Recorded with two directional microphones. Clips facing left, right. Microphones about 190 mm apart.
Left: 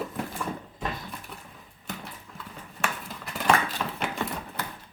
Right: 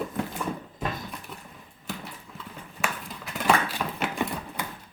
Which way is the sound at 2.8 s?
Centre (ahead or behind).